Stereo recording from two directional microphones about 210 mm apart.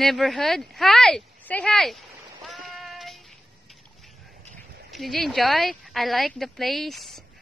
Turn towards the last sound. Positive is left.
turn(degrees=0)  # may be behind; listen again after turning